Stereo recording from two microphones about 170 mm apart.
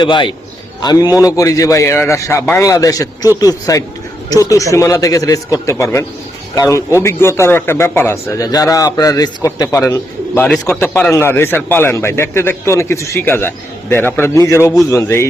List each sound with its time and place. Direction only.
0.0 s a man's voice: 30° left (ahead or behind)